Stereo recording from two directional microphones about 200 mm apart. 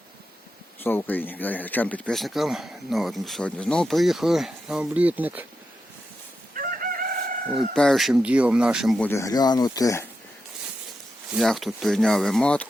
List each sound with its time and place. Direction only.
0.8 s speech: 10° left (ahead or behind); by 5.5 s 10° right (ahead or behind)
6.6 s chicken: 45° right (ahead or behind)
7.8 s speech: centre (ahead or behind)
9.0 s speech: 15° left (ahead or behind)
11.3 s speech: centre (ahead or behind)